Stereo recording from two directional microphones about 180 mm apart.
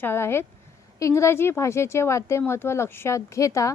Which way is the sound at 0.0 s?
15° left (ahead or behind).